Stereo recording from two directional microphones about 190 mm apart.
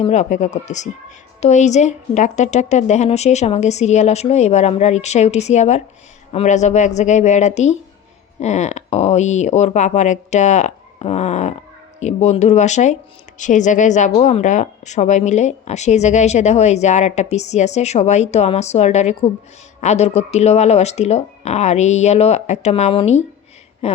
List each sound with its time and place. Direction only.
0.0 s a woman's voice: 35° left (ahead or behind)